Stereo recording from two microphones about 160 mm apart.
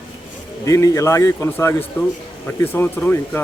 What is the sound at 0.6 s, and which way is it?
A man's voice, 20° left (ahead or behind).